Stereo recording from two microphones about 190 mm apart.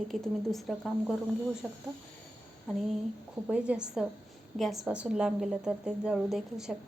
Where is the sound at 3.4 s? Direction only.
5° right (ahead or behind).